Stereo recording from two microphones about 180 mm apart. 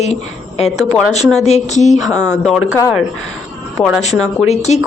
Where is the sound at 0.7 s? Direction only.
Centre (ahead or behind).